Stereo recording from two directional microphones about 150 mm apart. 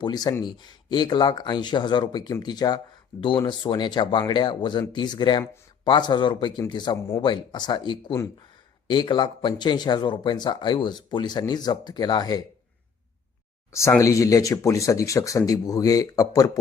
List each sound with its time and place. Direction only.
0.0 s speech: 25° left (ahead or behind)
14.0 s speech: 20° left (ahead or behind)